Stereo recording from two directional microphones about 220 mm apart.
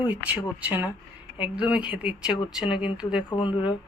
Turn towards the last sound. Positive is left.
turn(degrees=20)  # may be behind; listen again after turning